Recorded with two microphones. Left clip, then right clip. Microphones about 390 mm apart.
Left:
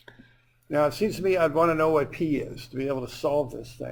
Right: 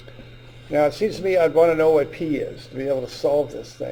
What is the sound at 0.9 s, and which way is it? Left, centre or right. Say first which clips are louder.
Speech: right 4 dB; left.